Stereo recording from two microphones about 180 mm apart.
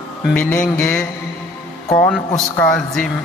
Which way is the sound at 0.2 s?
5° left (ahead or behind).